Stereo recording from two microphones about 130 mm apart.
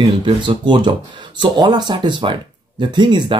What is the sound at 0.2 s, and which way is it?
Speech, 40° right (ahead or behind).